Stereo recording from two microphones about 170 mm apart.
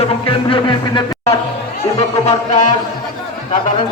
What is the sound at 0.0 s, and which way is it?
Music, 30° left (ahead or behind).